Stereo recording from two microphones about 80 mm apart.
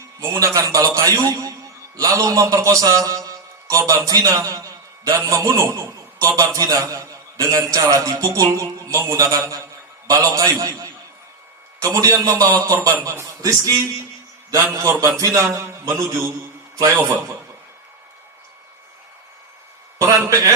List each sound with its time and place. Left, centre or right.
0.3 s a man's voice: right
14.7 s a man's voice: right
20.0 s a man's voice: right